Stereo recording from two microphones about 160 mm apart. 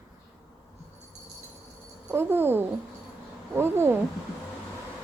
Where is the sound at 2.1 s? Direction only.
15° right (ahead or behind).